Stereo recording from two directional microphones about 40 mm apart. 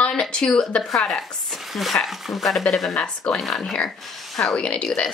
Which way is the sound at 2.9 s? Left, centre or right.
Left.